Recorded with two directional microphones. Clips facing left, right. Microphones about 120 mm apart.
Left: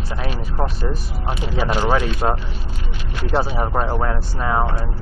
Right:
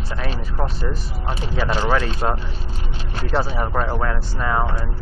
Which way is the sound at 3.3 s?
20° left (ahead or behind).